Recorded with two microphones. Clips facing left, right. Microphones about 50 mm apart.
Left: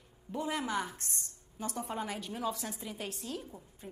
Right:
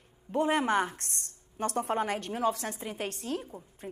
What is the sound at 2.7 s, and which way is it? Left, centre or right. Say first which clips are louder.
Speech: right 5 dB; right.